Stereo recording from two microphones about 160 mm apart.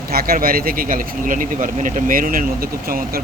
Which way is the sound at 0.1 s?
70° right (ahead or behind).